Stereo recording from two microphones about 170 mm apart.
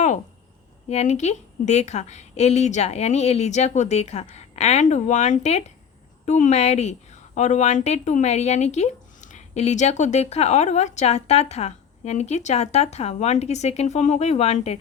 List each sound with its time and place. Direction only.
0.9 s a woman's voice: 40° left (ahead or behind)